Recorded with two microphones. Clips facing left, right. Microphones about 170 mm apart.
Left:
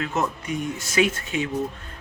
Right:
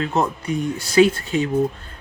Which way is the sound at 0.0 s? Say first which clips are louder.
Right 4 dB; 35° right (ahead or behind).